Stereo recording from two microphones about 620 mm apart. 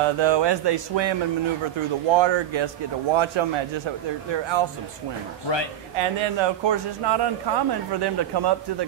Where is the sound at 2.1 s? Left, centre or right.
Right.